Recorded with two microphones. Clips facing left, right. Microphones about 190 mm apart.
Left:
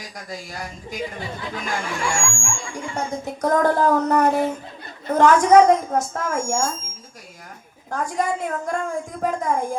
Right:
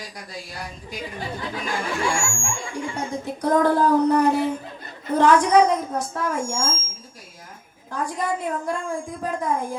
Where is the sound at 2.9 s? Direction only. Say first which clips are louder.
Left 1 dB; 45° left (ahead or behind).